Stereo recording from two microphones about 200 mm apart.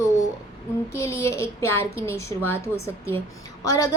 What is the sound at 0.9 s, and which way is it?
Speech, 15° left (ahead or behind).